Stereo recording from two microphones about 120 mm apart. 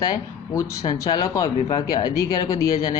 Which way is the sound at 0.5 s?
25° left (ahead or behind).